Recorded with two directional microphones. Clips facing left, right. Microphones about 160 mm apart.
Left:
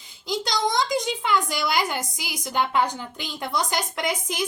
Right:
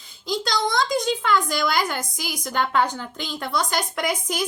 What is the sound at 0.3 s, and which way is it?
A woman's voice, 15° left (ahead or behind).